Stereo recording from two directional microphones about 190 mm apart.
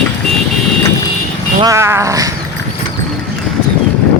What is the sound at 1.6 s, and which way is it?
Speech, 15° right (ahead or behind).